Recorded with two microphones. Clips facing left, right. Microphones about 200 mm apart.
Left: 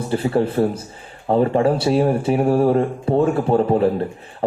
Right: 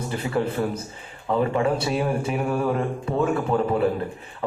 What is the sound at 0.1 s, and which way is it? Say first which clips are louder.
Speech: left 7 dB; 30° left (ahead or behind).